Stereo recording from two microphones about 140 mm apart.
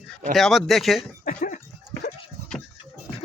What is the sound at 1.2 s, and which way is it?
Cough, 80° left.